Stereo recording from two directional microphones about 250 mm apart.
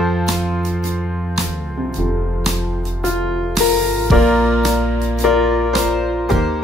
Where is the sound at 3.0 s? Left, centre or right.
Centre.